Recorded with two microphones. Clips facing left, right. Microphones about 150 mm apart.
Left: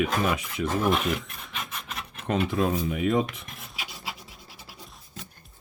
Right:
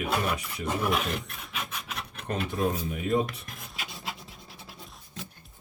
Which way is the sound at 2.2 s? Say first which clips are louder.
Left 4 dB; 90° left.